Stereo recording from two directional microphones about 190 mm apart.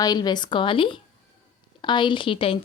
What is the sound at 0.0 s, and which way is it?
A woman's voice, 20° left (ahead or behind).